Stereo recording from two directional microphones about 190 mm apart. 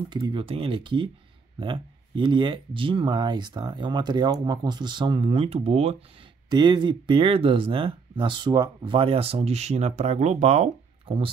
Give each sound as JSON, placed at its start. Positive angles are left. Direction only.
{"t": 0.1, "sound": "speech", "side_deg": -25}